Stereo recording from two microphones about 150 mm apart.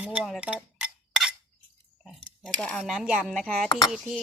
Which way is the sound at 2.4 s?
Centre (ahead or behind).